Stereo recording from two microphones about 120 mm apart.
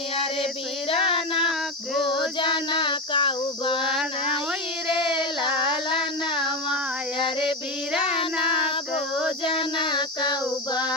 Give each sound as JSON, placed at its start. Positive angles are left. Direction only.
{"t": 1.1, "sound": "child singing", "side_deg": 50}
{"t": 4.9, "sound": "child singing", "side_deg": 45}
{"t": 5.6, "sound": "a sound", "side_deg": -5}
{"t": 8.1, "sound": "child singing", "side_deg": 45}
{"t": 9.4, "sound": "female singing", "side_deg": 45}